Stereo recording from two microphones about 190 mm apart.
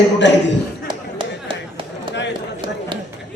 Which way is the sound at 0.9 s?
25° right (ahead or behind).